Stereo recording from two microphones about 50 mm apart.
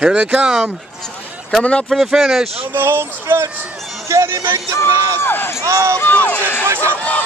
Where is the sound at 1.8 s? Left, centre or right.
Centre.